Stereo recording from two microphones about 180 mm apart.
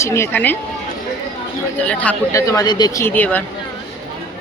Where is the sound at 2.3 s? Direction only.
15° left (ahead or behind).